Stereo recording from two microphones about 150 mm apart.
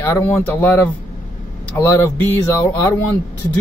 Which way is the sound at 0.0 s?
15° left (ahead or behind).